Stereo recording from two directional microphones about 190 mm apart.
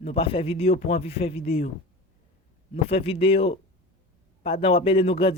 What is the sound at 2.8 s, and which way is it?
A man's voice, 30° left (ahead or behind).